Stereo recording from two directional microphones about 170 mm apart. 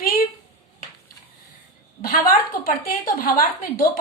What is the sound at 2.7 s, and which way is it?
A woman's voice, 55° left (ahead or behind).